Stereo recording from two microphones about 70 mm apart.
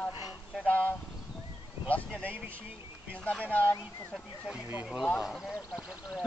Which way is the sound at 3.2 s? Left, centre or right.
Centre.